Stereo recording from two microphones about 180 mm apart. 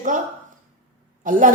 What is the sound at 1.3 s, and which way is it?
Speech, 50° right (ahead or behind).